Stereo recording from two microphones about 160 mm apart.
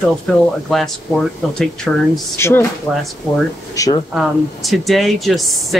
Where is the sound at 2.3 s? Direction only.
15° left (ahead or behind).